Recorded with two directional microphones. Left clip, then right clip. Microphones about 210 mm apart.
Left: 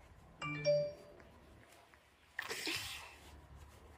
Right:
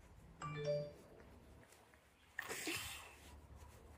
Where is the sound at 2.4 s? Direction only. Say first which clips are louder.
Left 4 dB; 5° left (ahead or behind).